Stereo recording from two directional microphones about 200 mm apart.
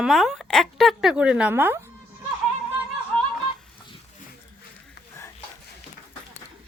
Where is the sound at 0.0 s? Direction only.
Centre (ahead or behind).